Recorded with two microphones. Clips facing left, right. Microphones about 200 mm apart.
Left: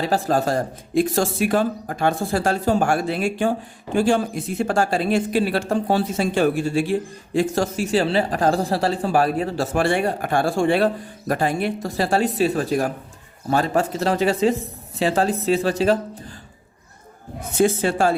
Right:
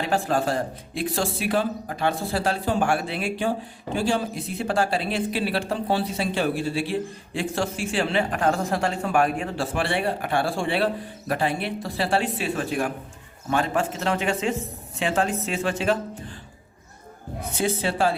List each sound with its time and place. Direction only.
0.0 s speech: 40° left (ahead or behind)
17.6 s speech: 45° left (ahead or behind)